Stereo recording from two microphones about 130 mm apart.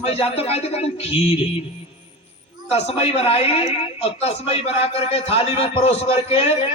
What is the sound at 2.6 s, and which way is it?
A woman's voice, 50° left (ahead or behind).